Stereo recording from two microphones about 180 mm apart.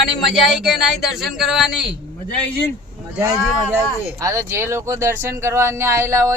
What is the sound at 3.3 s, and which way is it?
Speech, centre (ahead or behind).